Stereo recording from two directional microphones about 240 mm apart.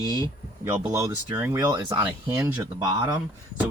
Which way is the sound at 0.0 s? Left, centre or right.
Centre.